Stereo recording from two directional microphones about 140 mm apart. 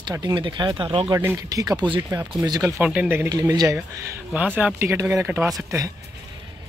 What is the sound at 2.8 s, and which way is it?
Speech, 10° right (ahead or behind).